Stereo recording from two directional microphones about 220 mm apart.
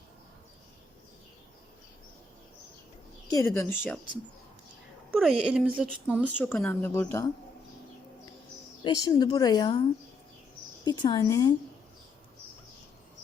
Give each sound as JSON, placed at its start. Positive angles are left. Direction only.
{"t": 3.2, "sound": "a woman's voice", "side_deg": 15}
{"t": 5.1, "sound": "a woman's voice", "side_deg": 0}
{"t": 6.4, "sound": "a woman's voice", "side_deg": 10}
{"t": 8.8, "sound": "a woman's voice", "side_deg": 20}
{"t": 10.8, "sound": "a woman's voice", "side_deg": 20}